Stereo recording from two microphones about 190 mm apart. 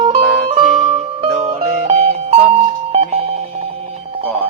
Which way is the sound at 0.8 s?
35° right (ahead or behind).